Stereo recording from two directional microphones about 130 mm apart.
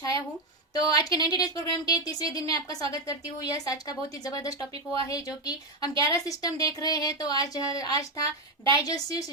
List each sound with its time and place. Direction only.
0.0 s a woman's voice: 30° left (ahead or behind)